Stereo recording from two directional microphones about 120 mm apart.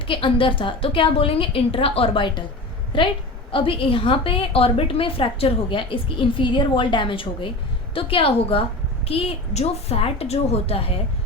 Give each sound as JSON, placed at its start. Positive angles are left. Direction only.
{"t": 0.1, "sound": "a woman's voice", "side_deg": 45}